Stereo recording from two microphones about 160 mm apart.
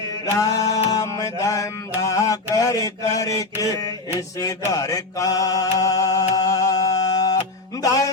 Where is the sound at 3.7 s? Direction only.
20° left (ahead or behind).